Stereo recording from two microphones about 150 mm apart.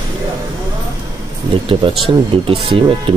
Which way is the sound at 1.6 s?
35° right (ahead or behind).